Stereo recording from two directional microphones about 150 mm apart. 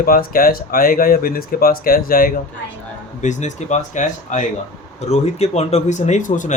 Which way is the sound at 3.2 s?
50° left (ahead or behind).